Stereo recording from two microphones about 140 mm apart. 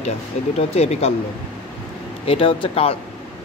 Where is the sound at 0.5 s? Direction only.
50° left (ahead or behind).